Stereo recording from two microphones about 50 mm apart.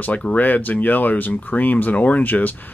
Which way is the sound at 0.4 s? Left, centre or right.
Left.